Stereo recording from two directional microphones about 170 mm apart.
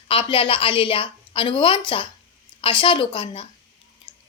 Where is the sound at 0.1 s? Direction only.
35° left (ahead or behind).